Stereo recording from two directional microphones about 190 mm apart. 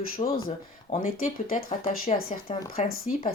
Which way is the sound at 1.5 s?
40° left (ahead or behind).